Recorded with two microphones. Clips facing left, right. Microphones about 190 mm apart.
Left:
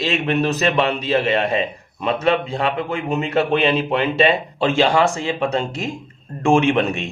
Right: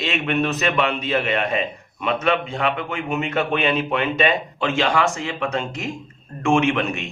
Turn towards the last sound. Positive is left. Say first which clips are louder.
# left 3 dB
turn(degrees=35)  # may be behind; listen again after turning